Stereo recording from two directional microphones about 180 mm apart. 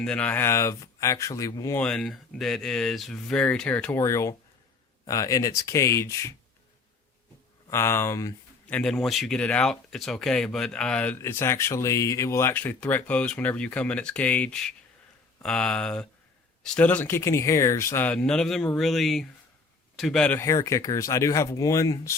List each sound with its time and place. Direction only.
0.0 s speech: 5° left (ahead or behind)
1.8 s speech: 5° left (ahead or behind)
7.7 s speech: 15° left (ahead or behind)
8.7 s speech: centre (ahead or behind)